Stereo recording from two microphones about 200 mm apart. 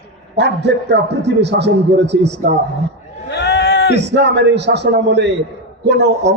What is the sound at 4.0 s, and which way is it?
A man's voice, 60° right (ahead or behind).